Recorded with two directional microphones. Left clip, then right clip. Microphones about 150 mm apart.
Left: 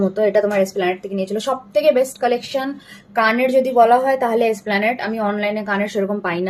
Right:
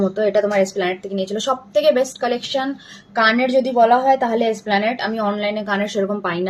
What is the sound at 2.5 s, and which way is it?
A woman's voice, 15° left (ahead or behind).